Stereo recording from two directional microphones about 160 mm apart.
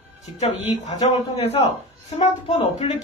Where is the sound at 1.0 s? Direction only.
40° left (ahead or behind).